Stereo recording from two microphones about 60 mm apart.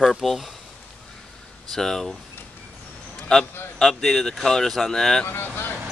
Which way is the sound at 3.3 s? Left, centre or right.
Centre.